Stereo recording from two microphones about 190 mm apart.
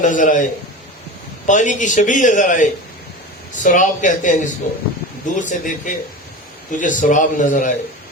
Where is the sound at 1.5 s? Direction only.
40° left (ahead or behind).